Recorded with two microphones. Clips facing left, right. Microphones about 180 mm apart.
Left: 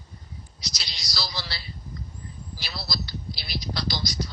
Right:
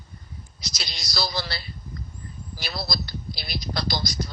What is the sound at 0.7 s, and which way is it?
A man's voice, 50° right (ahead or behind).